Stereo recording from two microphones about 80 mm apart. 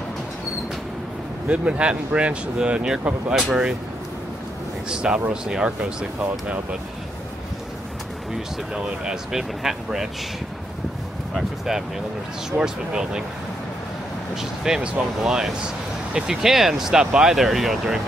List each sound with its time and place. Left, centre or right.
1.5 s speech: centre
4.8 s speech: centre
8.7 s speech: centre
11.3 s speech: centre
14.3 s speech: centre